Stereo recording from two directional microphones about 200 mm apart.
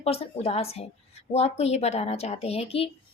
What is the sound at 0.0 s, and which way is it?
A woman's voice, 30° left (ahead or behind).